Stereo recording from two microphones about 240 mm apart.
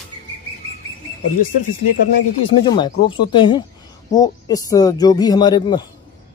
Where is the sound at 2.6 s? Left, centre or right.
Centre.